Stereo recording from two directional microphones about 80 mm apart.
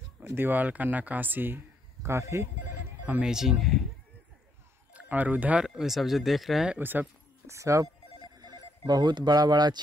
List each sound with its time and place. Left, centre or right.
0.2 s speech: right
2.0 s speech: right
3.1 s speech: centre
4.9 s speech: right
5.8 s speech: centre
6.8 s speech: right
7.4 s speech: right
8.2 s telephone bell ringing: right